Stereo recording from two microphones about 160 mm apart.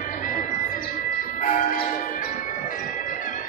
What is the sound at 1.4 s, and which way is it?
Church bell, 60° left (ahead or behind).